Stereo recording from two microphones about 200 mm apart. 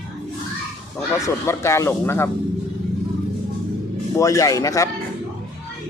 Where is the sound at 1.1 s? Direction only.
15° left (ahead or behind).